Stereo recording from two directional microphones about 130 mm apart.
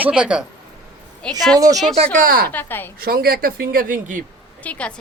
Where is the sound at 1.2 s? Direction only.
5° left (ahead or behind).